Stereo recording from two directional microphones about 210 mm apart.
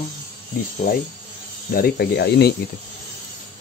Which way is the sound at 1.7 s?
45° left (ahead or behind).